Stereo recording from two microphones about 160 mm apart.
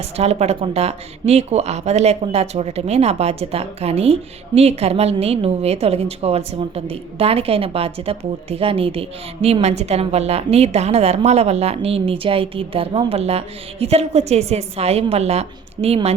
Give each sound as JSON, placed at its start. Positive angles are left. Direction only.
{"t": 0.2, "sound": "a woman's voice", "side_deg": -40}